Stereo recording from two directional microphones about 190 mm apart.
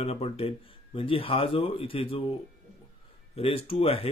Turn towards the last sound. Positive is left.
turn(degrees=30)  # may be behind; listen again after turning